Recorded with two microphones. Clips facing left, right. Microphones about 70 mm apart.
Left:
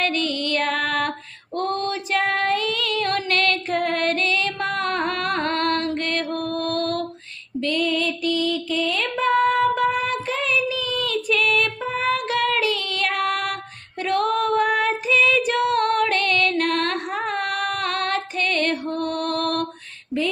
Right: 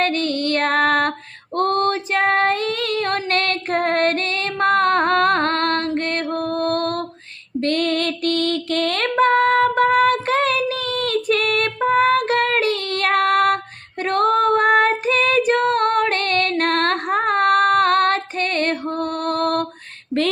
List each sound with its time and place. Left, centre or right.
0.0 s music: right
1.5 s female singing: right
1.9 s female singing: right
5.9 s music: right
7.6 s female singing: right